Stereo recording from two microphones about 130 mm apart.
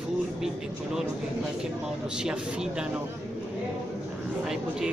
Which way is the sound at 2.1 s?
5° right (ahead or behind).